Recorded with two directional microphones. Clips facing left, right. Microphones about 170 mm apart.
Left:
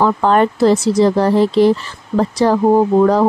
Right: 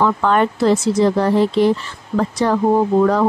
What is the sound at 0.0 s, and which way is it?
Speech, 35° left (ahead or behind).